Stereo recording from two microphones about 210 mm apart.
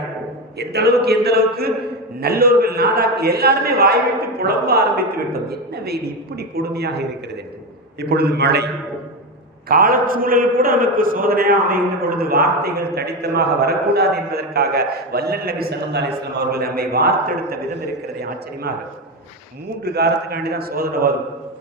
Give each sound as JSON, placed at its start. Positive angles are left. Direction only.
{"t": 0.6, "sound": "a man's voice", "side_deg": -50}
{"t": 8.1, "sound": "a man's voice", "side_deg": -50}
{"t": 19.8, "sound": "a man's voice", "side_deg": -50}